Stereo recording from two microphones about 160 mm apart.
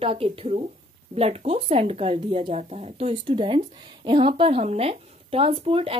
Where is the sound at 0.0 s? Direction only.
35° right (ahead or behind).